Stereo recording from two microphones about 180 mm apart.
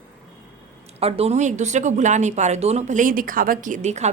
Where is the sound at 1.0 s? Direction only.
35° right (ahead or behind).